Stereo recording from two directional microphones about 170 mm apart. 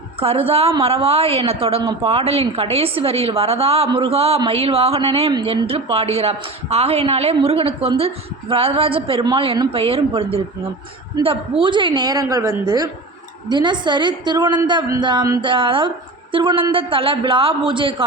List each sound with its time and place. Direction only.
0.2 s a woman's voice: 35° right (ahead or behind)